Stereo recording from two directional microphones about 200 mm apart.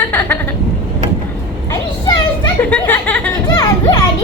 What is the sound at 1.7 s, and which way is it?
Children playing, 20° left (ahead or behind).